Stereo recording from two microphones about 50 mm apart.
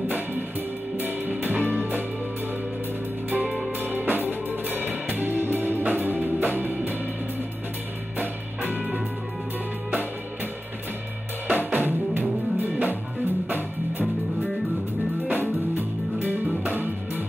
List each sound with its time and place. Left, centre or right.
0.9 s music: right
3.3 s music: right
8.2 s music: right
11.4 s drum kit: right
13.5 s music: right
15.7 s music: right